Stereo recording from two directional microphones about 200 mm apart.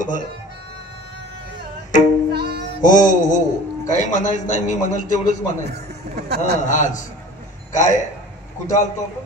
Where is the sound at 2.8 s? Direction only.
40° left (ahead or behind).